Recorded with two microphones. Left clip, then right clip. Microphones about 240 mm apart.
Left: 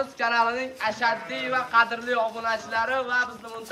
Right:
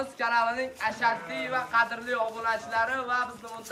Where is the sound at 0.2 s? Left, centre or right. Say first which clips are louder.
Left 2 dB; centre.